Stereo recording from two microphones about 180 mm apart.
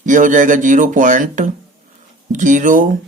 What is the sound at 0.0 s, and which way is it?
Speech, 45° right (ahead or behind).